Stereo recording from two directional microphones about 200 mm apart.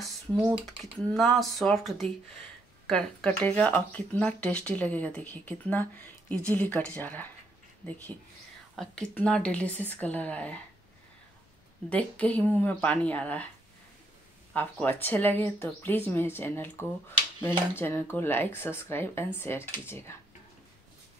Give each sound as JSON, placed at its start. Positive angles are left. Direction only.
{"t": 1.1, "sound": "speech", "side_deg": 0}
{"t": 11.9, "sound": "speech", "side_deg": 5}
{"t": 14.5, "sound": "speech", "side_deg": 10}